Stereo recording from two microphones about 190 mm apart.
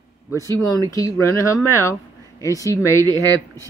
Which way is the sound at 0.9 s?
15° left (ahead or behind).